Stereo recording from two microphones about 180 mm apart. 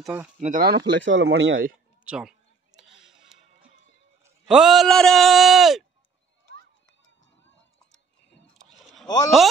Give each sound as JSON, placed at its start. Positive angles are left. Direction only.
{"t": 0.4, "sound": "speech", "side_deg": -50}
{"t": 2.0, "sound": "a sound", "side_deg": -5}
{"t": 4.5, "sound": "a man's voice", "side_deg": 0}
{"t": 9.0, "sound": "speech", "side_deg": 20}